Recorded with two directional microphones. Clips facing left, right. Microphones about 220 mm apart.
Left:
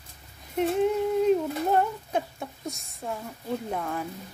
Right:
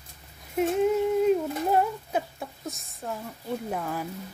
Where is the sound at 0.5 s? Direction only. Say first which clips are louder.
Right 1 dB; 5° right (ahead or behind).